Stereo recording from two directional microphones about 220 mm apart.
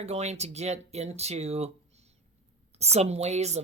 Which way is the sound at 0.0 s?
30° right (ahead or behind).